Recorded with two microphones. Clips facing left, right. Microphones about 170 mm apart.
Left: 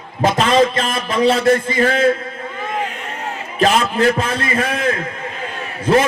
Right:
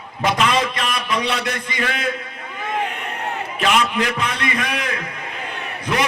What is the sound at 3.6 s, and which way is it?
A man's voice, 35° left (ahead or behind).